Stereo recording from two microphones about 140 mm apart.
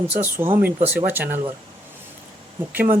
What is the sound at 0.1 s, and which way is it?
Speech, 15° right (ahead or behind).